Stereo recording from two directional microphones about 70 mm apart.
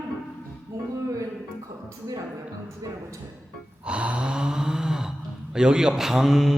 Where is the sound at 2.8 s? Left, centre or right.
Right.